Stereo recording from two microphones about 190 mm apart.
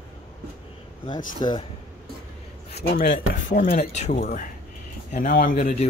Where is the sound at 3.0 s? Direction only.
45° left (ahead or behind).